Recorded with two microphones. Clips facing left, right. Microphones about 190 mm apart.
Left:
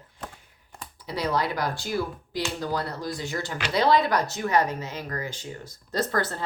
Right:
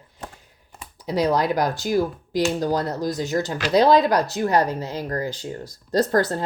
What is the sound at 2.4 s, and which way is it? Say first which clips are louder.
Speech: right 6 dB; 40° right (ahead or behind).